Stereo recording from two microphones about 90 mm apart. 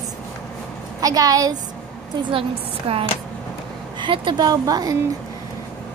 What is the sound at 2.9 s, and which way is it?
Speech, 80° right.